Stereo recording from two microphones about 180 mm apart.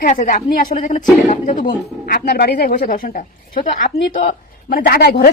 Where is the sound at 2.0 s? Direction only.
60° left (ahead or behind).